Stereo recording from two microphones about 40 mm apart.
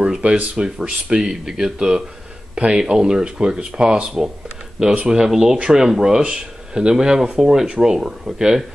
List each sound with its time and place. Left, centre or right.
0.0 s speech: right; by 7.6 s centre
7.6 s speech: right
7.9 s speech: centre